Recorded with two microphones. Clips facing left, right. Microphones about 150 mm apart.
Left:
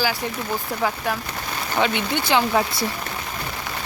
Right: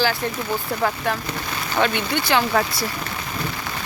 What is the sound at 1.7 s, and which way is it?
Speech, 15° left (ahead or behind).